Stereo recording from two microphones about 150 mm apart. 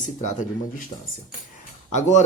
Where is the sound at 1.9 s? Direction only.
50° left (ahead or behind).